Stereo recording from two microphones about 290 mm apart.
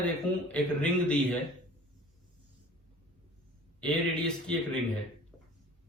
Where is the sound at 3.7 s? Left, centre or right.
Centre.